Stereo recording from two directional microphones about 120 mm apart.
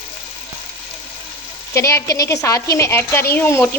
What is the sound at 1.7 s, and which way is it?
A woman's voice, 25° left (ahead or behind).